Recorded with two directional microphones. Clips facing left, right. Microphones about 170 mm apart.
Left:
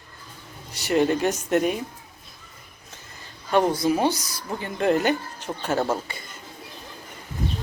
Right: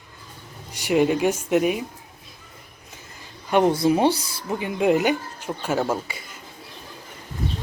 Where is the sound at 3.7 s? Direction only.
25° right (ahead or behind).